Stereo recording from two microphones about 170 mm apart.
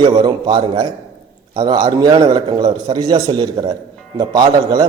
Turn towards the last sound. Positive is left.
turn(degrees=-25)  # may be behind; listen again after turning